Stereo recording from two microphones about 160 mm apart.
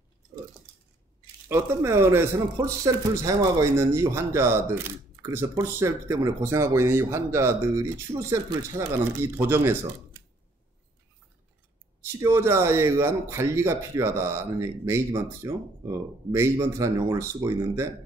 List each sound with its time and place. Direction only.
1.5 s speech: 15° right (ahead or behind)
12.0 s speech: 15° right (ahead or behind)